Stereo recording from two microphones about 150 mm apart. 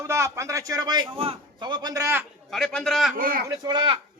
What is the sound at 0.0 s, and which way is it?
A man's voice, 20° right (ahead or behind).